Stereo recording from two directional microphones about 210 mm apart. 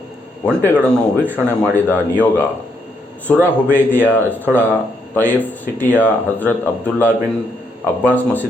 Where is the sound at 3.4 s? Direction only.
10° left (ahead or behind).